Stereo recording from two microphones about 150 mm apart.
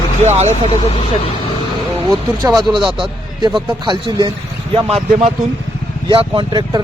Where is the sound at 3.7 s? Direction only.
30° right (ahead or behind).